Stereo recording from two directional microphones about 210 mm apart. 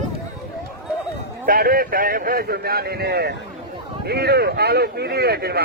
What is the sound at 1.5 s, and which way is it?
Speech, 45° right (ahead or behind).